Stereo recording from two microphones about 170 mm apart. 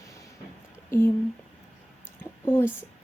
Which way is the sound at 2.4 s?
15° left (ahead or behind).